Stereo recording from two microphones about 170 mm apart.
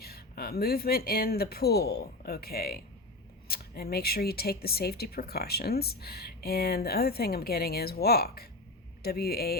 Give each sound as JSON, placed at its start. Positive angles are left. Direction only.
{"t": 0.0, "sound": "speech", "side_deg": 65}